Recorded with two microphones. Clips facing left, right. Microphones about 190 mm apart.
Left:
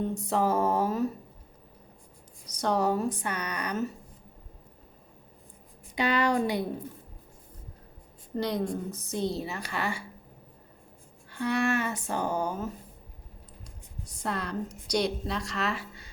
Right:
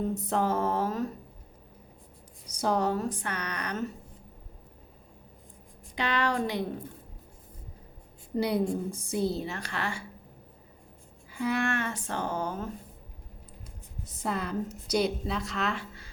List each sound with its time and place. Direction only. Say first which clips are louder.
0.0 s speech: left 1 dB; centre (ahead or behind)
2.5 s speech: even; 10° right (ahead or behind)
2.7 s speech: left 4 dB; 10° left (ahead or behind)
6.0 s speech: left 3 dB; 10° left (ahead or behind)
8.4 s a woman's voice: right 2 dB; 10° right (ahead or behind); by 10.0 s 10° left (ahead or behind)
11.3 s speech: left 2 dB; 5° right (ahead or behind)
14.1 s a woman's voice: right 1 dB; 5° right (ahead or behind)